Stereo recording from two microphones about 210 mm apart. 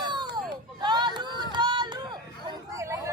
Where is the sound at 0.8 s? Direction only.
20° right (ahead or behind).